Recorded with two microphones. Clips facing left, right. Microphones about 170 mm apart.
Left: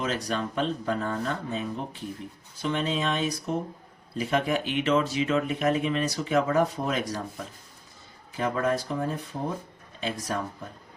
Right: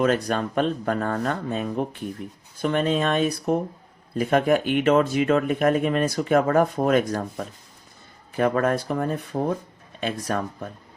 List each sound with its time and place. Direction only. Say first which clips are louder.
0.0 s speech: right 7 dB; 55° right (ahead or behind)